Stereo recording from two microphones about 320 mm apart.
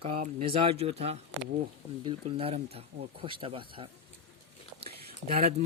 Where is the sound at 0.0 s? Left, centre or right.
Centre.